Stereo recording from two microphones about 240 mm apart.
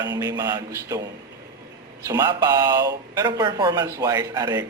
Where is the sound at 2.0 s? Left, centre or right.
Centre.